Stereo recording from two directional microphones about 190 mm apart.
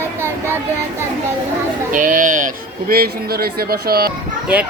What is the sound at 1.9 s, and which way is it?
Speech, 45° right (ahead or behind).